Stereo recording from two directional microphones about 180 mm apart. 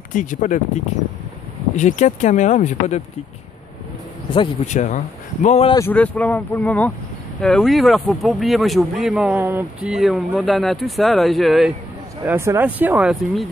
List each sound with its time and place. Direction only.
0.1 s speech: 45° left (ahead or behind)
4.6 s speech: 45° left (ahead or behind)
5.7 s speech: 15° left (ahead or behind)
12.3 s speech: 15° right (ahead or behind)